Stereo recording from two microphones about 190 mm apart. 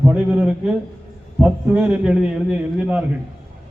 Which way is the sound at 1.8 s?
5° right (ahead or behind).